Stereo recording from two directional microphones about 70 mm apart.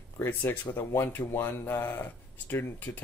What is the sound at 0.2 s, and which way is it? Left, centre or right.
Speech, left.